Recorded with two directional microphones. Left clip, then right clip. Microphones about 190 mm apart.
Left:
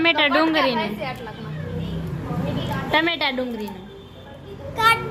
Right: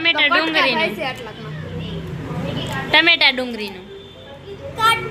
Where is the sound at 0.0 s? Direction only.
40° left (ahead or behind).